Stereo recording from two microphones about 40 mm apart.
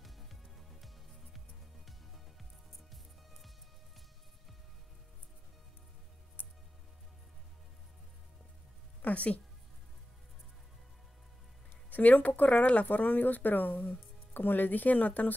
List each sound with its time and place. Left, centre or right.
0.0 s music: centre
2.9 s music: centre
9.0 s speech: left
11.9 s speech: left